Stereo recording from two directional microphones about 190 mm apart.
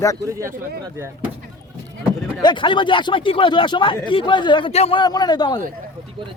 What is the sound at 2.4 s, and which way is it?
Speech, 25° left (ahead or behind).